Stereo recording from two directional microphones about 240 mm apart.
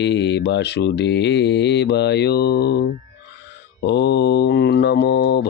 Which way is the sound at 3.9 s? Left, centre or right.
Left.